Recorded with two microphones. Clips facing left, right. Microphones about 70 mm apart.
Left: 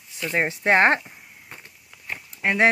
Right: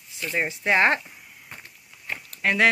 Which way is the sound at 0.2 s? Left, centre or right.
Left.